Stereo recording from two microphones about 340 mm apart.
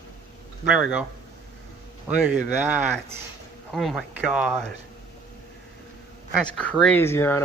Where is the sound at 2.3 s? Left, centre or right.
Centre.